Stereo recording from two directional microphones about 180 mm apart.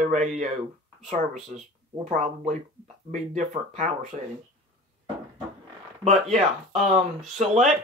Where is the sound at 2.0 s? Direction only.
40° right (ahead or behind).